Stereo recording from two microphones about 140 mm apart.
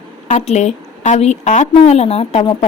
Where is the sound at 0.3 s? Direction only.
55° left (ahead or behind).